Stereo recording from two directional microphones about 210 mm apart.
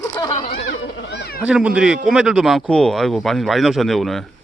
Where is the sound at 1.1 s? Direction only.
50° left (ahead or behind).